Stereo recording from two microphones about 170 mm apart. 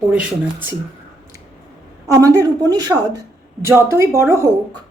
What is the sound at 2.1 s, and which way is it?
A woman's voice, 20° right (ahead or behind).